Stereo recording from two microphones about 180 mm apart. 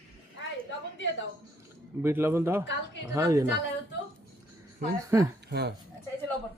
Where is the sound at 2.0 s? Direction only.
15° right (ahead or behind).